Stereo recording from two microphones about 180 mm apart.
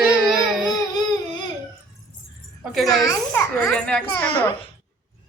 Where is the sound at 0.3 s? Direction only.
Centre (ahead or behind).